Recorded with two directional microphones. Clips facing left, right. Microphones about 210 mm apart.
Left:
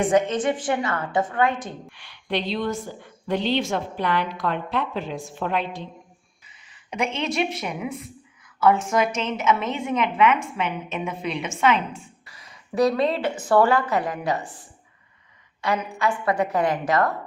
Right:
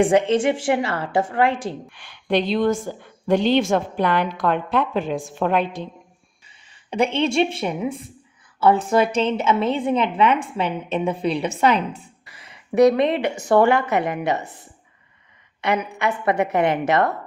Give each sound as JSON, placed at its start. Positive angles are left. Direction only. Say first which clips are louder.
{"t": 0.0, "sound": "a woman's voice", "louder": "right 4 dB", "side_deg": -30}
{"t": 1.9, "sound": "a woman's voice", "louder": "right 6 dB", "side_deg": -50}
{"t": 6.9, "sound": "a woman's voice", "louder": "right 6 dB", "side_deg": -30}
{"t": 12.7, "sound": "a woman's voice", "louder": "right 5 dB", "side_deg": -20}
{"t": 15.6, "sound": "a woman's voice", "louder": "right 2 dB", "side_deg": -20}